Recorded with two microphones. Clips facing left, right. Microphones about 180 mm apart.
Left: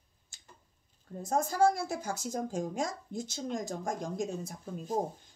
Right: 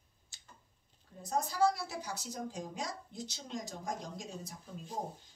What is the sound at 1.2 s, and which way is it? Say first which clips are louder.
Speech: left 4 dB; 50° left (ahead or behind).